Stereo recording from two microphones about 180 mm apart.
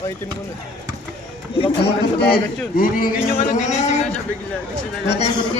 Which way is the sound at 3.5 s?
40° left (ahead or behind).